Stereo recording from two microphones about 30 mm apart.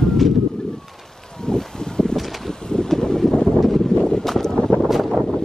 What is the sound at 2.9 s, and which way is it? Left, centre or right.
Vehicle, centre.